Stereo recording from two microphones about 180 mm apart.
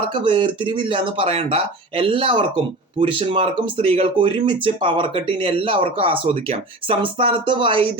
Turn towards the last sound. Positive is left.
turn(degrees=-30)  # may be behind; listen again after turning